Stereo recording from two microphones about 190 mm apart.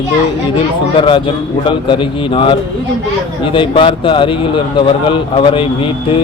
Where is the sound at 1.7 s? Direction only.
25° left (ahead or behind).